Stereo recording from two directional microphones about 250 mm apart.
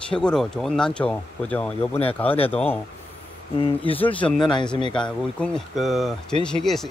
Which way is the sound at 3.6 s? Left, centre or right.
Left.